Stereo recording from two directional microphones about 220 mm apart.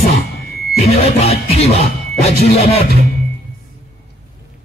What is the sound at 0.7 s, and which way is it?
Music, 30° left (ahead or behind).